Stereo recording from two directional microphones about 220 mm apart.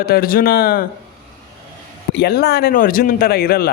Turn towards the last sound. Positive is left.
turn(degrees=45)  # may be behind; listen again after turning